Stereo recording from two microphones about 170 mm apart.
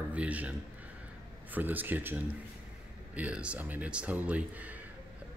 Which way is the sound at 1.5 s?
10° right (ahead or behind).